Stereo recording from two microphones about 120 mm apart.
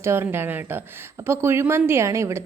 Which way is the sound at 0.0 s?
20° right (ahead or behind).